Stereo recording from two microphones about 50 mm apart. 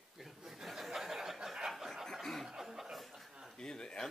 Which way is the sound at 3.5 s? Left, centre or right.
Centre.